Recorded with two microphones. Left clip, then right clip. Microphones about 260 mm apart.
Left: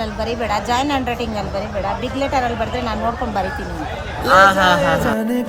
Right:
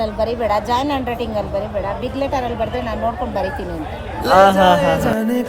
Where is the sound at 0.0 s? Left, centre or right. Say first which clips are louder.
Right 3 dB; centre.